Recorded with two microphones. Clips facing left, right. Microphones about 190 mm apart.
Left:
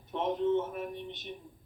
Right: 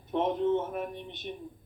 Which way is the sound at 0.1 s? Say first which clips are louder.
Right 2 dB; 55° right (ahead or behind).